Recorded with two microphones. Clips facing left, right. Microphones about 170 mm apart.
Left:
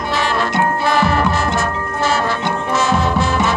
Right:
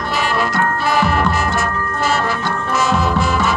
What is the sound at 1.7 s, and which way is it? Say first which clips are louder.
Music: even; 20° left (ahead or behind).